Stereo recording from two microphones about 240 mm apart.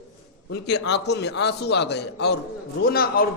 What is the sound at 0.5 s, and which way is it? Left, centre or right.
A man's voice, left.